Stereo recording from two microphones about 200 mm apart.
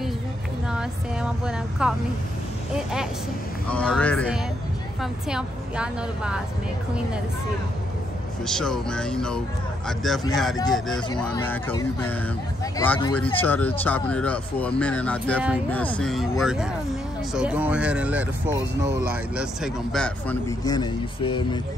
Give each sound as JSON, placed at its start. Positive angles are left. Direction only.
{"t": 0.7, "sound": "a woman's voice", "side_deg": -5}
{"t": 5.0, "sound": "a woman's voice", "side_deg": -5}
{"t": 8.5, "sound": "a woman's voice", "side_deg": 0}
{"t": 12.7, "sound": "a woman's voice", "side_deg": 10}
{"t": 19.3, "sound": "a woman's voice", "side_deg": 0}
{"t": 20.4, "sound": "speech", "side_deg": 20}